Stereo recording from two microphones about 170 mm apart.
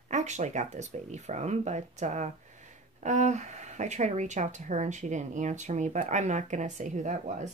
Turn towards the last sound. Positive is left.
turn(degrees=-45)  # may be behind; listen again after turning